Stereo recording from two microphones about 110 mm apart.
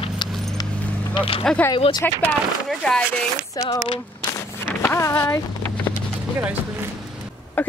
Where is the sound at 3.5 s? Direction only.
30° left (ahead or behind).